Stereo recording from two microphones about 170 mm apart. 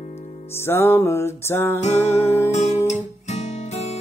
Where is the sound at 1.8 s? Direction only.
40° left (ahead or behind).